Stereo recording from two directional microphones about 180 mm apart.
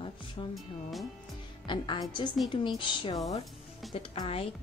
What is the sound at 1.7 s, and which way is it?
Speech, 25° left (ahead or behind).